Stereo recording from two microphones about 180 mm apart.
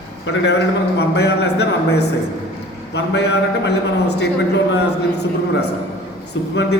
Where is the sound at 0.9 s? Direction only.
65° left (ahead or behind).